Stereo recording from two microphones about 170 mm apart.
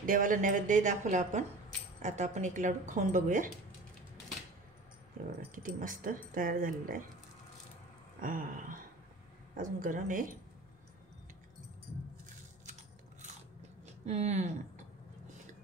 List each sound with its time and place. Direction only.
0.0 s speech: 55° right (ahead or behind)
5.5 s speech: 50° right (ahead or behind)
8.2 s a sound: 55° right (ahead or behind)
9.6 s speech: 50° right (ahead or behind)
13.8 s speech: 40° right (ahead or behind)